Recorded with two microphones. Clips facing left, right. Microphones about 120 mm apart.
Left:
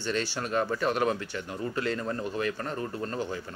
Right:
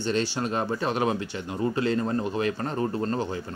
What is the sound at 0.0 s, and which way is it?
Speech, 20° right (ahead or behind).